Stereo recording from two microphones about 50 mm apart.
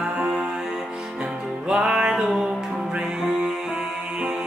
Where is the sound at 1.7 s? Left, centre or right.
Centre.